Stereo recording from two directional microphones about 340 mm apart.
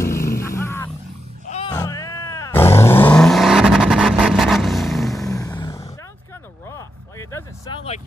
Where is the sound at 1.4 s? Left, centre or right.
Centre.